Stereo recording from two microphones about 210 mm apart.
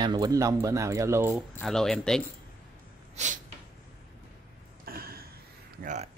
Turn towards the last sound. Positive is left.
turn(degrees=-35)  # may be behind; listen again after turning